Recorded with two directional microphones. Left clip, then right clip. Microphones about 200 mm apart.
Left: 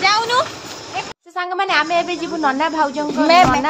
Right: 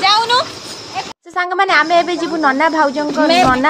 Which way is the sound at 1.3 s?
25° right (ahead or behind).